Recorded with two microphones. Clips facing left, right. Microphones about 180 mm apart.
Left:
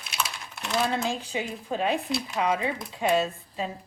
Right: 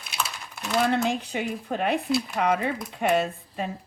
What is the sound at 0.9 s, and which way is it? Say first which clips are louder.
Speech: right 3 dB; 60° right (ahead or behind).